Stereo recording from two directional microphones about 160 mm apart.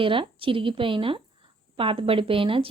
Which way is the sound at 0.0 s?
35° right (ahead or behind).